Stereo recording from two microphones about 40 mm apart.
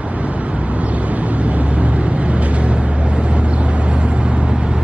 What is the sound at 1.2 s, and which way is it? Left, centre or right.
Vehicle, right.